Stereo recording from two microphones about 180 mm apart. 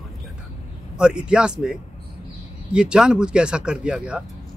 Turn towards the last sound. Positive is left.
turn(degrees=-5)  # may be behind; listen again after turning